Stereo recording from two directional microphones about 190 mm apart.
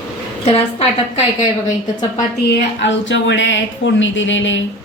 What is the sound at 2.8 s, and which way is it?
Speech, 70° left (ahead or behind).